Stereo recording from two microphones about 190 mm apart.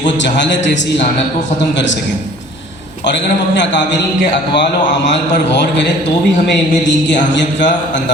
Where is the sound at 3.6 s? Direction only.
70° left (ahead or behind).